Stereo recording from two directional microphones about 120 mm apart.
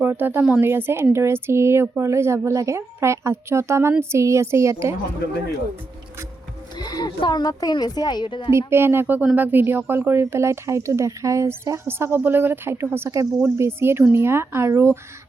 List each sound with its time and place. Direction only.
0.0 s speech: 15° right (ahead or behind)
6.7 s speech: 35° left (ahead or behind)
8.5 s speech: 20° right (ahead or behind)